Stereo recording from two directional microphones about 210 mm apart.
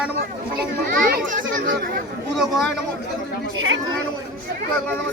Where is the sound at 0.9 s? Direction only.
40° right (ahead or behind).